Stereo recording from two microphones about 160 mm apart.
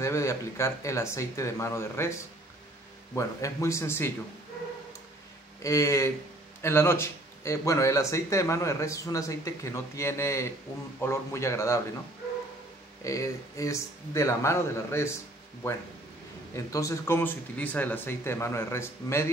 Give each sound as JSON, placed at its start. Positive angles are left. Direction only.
{"t": 0.0, "sound": "speech", "side_deg": 20}
{"t": 3.2, "sound": "speech", "side_deg": 20}
{"t": 5.6, "sound": "speech", "side_deg": 20}
{"t": 13.0, "sound": "speech", "side_deg": 20}
{"t": 16.5, "sound": "speech", "side_deg": 20}